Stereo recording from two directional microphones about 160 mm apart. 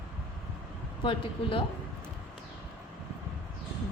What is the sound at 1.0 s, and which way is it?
Speech, 35° left (ahead or behind).